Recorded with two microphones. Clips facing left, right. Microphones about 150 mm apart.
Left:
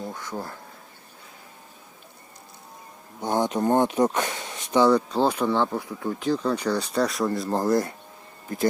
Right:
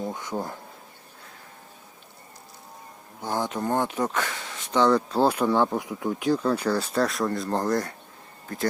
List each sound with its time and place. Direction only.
0.0 s speech: 20° right (ahead or behind)
3.2 s speech: 20° left (ahead or behind)
4.9 s speech: 5° right (ahead or behind)